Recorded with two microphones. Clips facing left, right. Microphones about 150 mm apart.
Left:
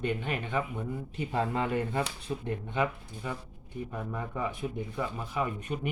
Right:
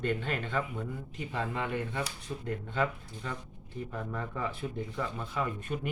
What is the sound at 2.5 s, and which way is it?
Speech, 15° left (ahead or behind).